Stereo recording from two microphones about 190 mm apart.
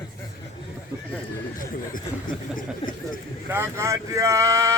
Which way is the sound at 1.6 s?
45° left (ahead or behind).